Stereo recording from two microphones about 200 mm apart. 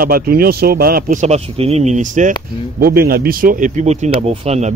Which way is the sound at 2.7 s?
50° right (ahead or behind).